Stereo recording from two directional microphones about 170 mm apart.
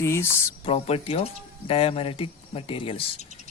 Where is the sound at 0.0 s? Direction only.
15° left (ahead or behind).